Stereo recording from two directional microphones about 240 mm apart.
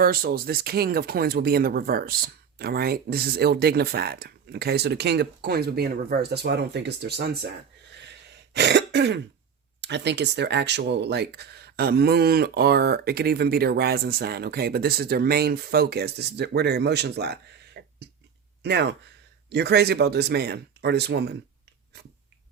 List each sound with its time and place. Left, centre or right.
0.0 s speech: right
7.9 s throat clearing: right
9.8 s speech: right
17.7 s a sound: right
18.6 s speech: right